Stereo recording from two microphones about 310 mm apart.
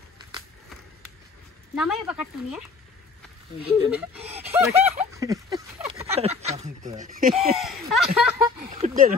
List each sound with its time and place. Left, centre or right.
1.8 s speech: centre
3.6 s speech: centre
4.3 s a sound: centre
6.4 s speech: right
7.3 s speech: centre
8.6 s speech: right